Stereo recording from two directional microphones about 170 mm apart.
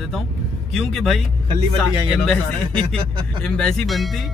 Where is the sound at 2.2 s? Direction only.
5° left (ahead or behind).